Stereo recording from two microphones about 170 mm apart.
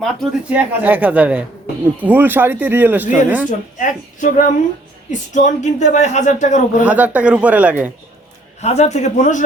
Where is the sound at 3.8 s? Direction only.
50° left (ahead or behind).